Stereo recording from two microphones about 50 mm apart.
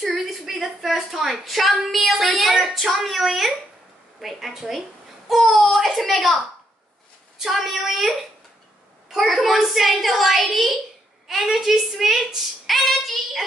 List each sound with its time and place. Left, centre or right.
0.2 s a woman's voice: centre
7.3 s a woman's voice: centre
9.1 s a woman's voice: centre